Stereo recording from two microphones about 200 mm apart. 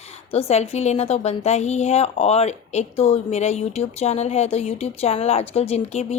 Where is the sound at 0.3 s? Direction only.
30° left (ahead or behind).